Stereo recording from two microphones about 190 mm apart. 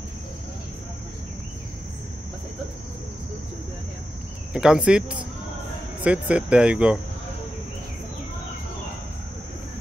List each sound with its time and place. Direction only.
4.6 s speech: 5° right (ahead or behind)